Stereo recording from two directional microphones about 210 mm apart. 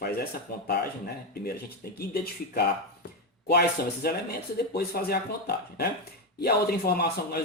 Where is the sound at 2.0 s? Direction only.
45° left (ahead or behind).